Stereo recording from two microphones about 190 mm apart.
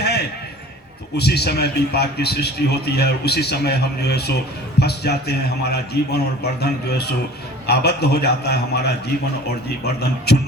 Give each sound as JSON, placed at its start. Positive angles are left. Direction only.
{"t": 1.1, "sound": "a man's voice", "side_deg": 60}
{"t": 9.8, "sound": "a man's voice", "side_deg": 60}